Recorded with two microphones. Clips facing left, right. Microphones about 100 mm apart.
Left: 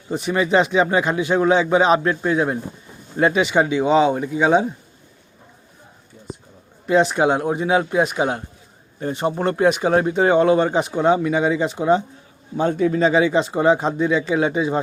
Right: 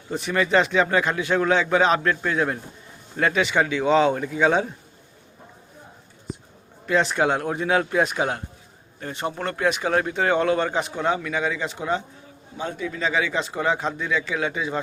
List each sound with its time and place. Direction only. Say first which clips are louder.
0.1 s speech: left 3 dB; 15° left (ahead or behind)
6.8 s speech: left 5 dB; 15° left (ahead or behind)
9.0 s speech: left 7 dB; 25° left (ahead or behind)
12.5 s a man's voice: left 11 dB; 45° left (ahead or behind)
13.0 s speech: left 6 dB; 25° left (ahead or behind)